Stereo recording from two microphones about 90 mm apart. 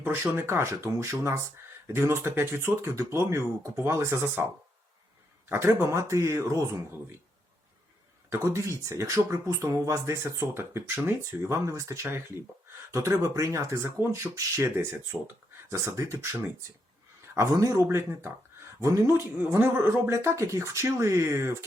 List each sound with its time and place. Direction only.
0.0 s speech: 25° right (ahead or behind)
5.5 s speech: 30° right (ahead or behind)
8.3 s speech: 35° right (ahead or behind)